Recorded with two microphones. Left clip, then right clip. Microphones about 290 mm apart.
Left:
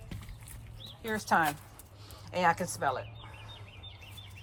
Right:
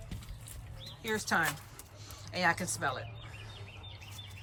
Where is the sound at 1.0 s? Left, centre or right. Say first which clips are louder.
Left 3 dB; centre.